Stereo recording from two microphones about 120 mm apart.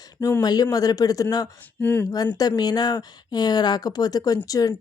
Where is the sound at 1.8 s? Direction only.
15° left (ahead or behind).